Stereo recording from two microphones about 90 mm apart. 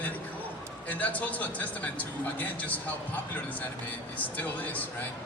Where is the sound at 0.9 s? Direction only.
20° left (ahead or behind).